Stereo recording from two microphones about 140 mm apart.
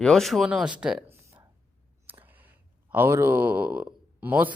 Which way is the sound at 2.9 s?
15° right (ahead or behind).